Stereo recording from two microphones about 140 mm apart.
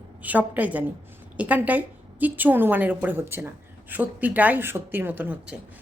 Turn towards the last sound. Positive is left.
turn(degrees=-10)  # may be behind; listen again after turning